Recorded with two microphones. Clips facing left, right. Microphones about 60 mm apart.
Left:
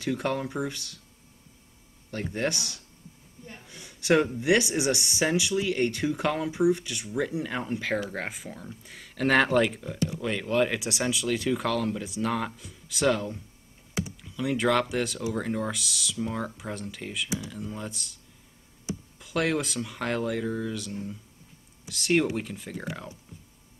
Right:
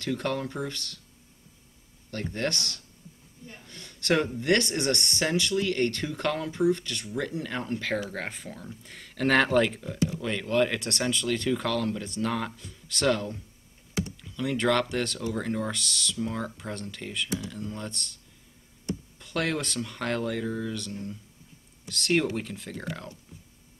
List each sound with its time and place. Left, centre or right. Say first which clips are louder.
0.0 s speech: left 1 dB; centre
2.0 s speech: left 1 dB; centre